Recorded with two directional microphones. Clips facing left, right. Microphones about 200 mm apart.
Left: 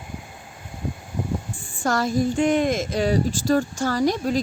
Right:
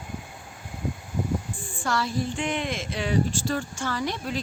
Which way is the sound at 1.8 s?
45° left (ahead or behind).